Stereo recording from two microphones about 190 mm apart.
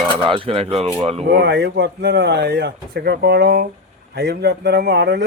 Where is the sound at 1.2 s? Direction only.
60° right (ahead or behind).